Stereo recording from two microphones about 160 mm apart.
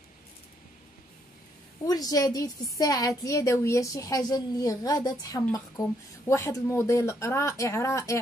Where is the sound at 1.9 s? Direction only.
25° left (ahead or behind).